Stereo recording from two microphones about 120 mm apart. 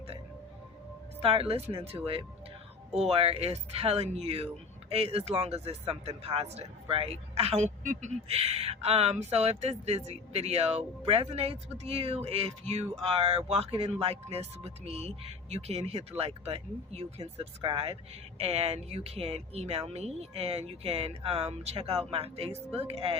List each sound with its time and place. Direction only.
1.2 s speech: 55° right (ahead or behind)
18.3 s speech: 60° right (ahead or behind)